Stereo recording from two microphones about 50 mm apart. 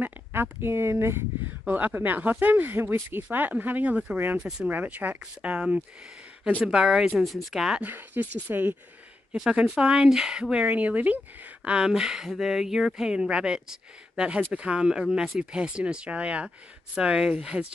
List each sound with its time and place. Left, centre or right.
0.3 s speech: right
1.7 s speech: right
4.4 s speech: centre
4.6 s speech: right
5.2 s speech: right
6.6 s speech: centre
7.8 s speech: right
9.3 s speech: centre
10.8 s speech: right
11.8 s speech: centre